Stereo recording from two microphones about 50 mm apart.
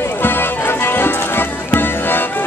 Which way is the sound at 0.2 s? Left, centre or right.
Left.